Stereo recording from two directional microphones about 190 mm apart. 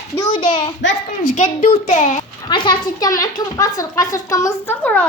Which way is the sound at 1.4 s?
40° left (ahead or behind).